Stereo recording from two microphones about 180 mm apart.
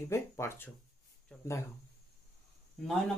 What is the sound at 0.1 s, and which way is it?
Speech, 15° left (ahead or behind).